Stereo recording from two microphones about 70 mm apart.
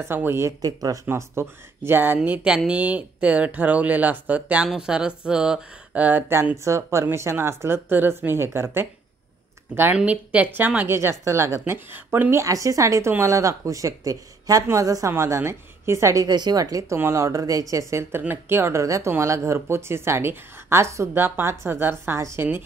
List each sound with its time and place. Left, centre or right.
0.0 s speech: right
0.6 s speech: right
1.0 s speech: right
2.1 s speech: centre
5.9 s speech: right
6.5 s speech: right
9.9 s speech: centre
10.9 s speech: right
11.6 s speech: right
12.4 s speech: right
15.0 s speech: right
16.3 s a woman's voice: right
16.9 s speech: right
18.3 s speech: right